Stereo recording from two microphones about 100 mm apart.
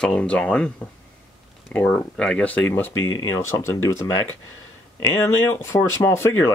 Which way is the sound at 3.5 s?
30° left (ahead or behind).